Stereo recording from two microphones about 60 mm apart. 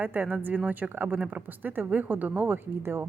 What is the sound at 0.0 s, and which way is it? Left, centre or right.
A woman's voice, right.